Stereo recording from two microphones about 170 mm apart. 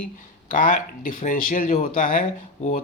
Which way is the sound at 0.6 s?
55° left (ahead or behind).